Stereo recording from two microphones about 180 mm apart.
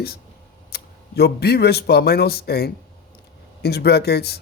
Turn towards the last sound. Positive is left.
turn(degrees=65)  # may be behind; listen again after turning